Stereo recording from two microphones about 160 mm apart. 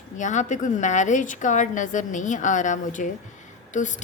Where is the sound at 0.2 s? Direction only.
50° left (ahead or behind).